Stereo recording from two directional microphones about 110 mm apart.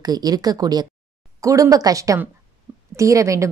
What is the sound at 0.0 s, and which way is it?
A woman's voice, 35° right (ahead or behind).